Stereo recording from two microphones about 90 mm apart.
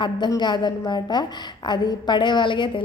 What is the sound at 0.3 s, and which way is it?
A woman's voice, 55° left (ahead or behind).